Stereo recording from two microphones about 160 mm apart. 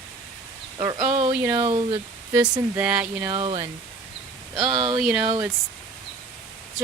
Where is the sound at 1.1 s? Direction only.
35° right (ahead or behind).